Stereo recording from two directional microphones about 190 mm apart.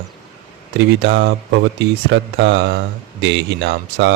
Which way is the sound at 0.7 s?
70° right (ahead or behind).